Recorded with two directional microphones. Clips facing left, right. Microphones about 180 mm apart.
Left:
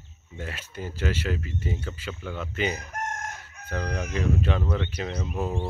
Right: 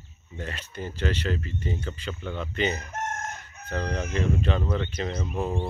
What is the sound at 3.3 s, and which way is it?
Chicken, 10° left (ahead or behind).